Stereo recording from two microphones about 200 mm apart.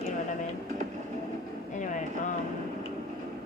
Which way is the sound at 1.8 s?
40° left (ahead or behind).